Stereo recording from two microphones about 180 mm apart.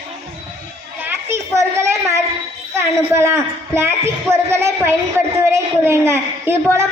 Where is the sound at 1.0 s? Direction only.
15° right (ahead or behind).